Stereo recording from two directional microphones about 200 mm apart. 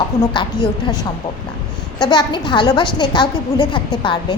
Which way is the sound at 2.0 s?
20° left (ahead or behind).